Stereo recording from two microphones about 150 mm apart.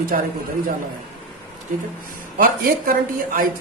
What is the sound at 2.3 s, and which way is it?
Speech, 65° right (ahead or behind).